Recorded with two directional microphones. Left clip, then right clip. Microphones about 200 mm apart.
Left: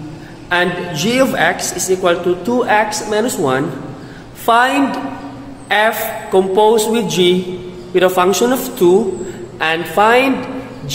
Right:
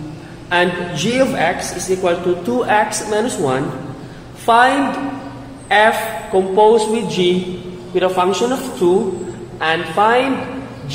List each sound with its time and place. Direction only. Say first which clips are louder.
0.5 s a man's voice: even; 20° left (ahead or behind)
2.4 s a man's voice: left 1 dB; 10° left (ahead or behind); by 10.2 s 30° left (ahead or behind)